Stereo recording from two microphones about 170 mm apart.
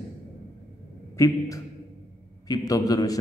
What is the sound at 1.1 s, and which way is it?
A man's voice, 15° left (ahead or behind).